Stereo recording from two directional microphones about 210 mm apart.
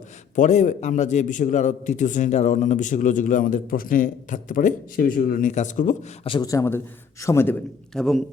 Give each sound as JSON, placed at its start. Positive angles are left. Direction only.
{"t": 0.3, "sound": "a man's voice", "side_deg": 35}
{"t": 6.2, "sound": "a man's voice", "side_deg": 20}
{"t": 7.9, "sound": "a man's voice", "side_deg": 0}